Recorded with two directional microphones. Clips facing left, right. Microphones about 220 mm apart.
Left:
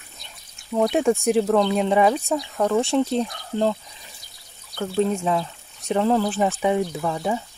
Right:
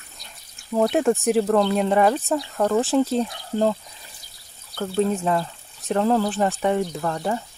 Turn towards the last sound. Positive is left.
turn(degrees=5)  # may be behind; listen again after turning